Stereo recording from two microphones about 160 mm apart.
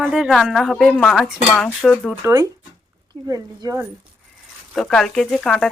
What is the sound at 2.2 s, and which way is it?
Speech, 20° right (ahead or behind).